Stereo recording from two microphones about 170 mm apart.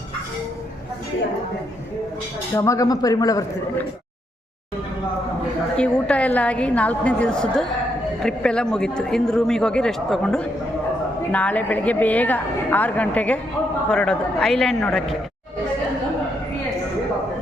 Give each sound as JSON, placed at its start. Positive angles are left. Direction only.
{"t": 2.6, "sound": "a man's voice", "side_deg": 20}
{"t": 5.7, "sound": "a woman's voice", "side_deg": 5}